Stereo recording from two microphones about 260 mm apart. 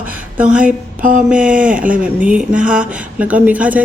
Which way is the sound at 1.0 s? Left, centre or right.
Right.